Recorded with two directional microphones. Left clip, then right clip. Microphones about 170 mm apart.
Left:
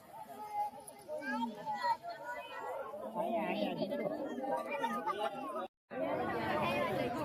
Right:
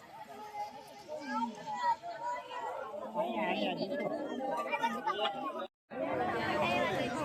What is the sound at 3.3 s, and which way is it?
Chatter, 90° left.